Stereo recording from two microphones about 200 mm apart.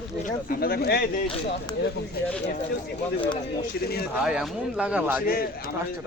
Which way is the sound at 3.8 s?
50° left (ahead or behind).